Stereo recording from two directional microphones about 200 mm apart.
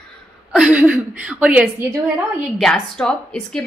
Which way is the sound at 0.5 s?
5° right (ahead or behind).